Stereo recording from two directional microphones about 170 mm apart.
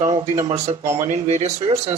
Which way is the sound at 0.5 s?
40° right (ahead or behind).